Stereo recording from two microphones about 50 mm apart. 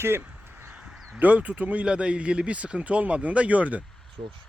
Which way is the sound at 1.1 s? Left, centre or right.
Right.